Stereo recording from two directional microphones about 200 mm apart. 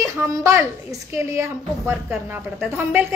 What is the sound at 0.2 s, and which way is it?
A woman's voice, 15° right (ahead or behind).